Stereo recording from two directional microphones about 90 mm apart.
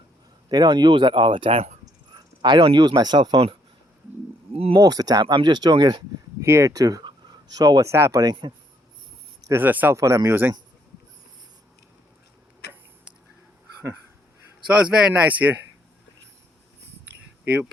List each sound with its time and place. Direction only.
0.4 s speech: 50° right (ahead or behind); by 1.6 s 80° right
1.8 s a sound: 55° right (ahead or behind)
4.5 s speech: 90° right
4.8 s speech: 45° right (ahead or behind)
6.4 s speech: 35° right (ahead or behind)
9.5 s speech: 20° right (ahead or behind)
9.9 s speech: 35° right (ahead or behind)
14.8 s speech: 15° right (ahead or behind)
17.4 s speech: 20° right (ahead or behind)